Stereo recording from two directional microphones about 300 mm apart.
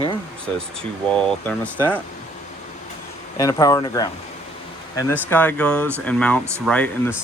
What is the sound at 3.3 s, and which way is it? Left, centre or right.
Speech, centre.